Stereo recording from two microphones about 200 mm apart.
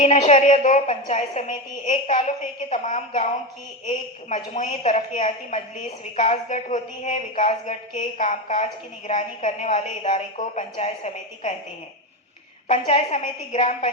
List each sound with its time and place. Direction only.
0.0 s a woman's voice: 35° left (ahead or behind)
12.6 s a woman's voice: 30° left (ahead or behind)